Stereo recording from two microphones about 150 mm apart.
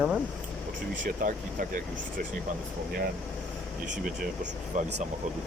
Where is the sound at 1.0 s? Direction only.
70° right (ahead or behind).